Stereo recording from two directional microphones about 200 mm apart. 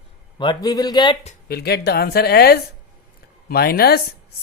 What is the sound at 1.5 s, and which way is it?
Speech, 55° left (ahead or behind).